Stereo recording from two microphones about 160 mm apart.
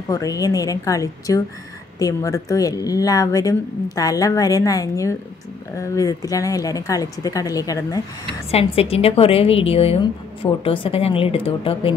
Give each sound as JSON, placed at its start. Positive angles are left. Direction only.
{"t": 0.1, "sound": "a woman's voice", "side_deg": 20}
{"t": 8.5, "sound": "a woman's voice", "side_deg": 40}